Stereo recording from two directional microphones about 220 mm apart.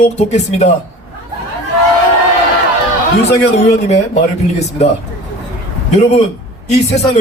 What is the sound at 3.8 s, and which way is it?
Speech, 30° left (ahead or behind).